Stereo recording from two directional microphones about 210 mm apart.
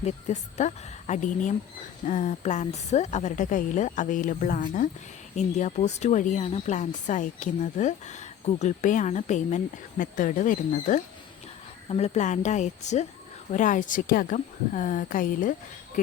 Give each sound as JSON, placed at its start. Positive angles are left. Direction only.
{"t": 0.0, "sound": "speech", "side_deg": 35}